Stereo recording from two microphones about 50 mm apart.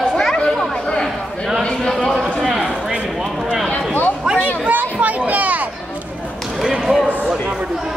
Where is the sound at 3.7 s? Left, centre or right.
Left.